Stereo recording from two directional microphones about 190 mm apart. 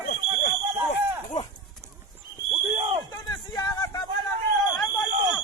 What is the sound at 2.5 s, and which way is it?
Basketball bounce, 25° right (ahead or behind).